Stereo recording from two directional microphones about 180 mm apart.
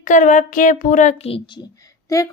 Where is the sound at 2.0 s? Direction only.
20° left (ahead or behind).